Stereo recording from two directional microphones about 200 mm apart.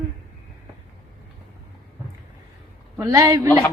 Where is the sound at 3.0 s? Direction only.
15° right (ahead or behind).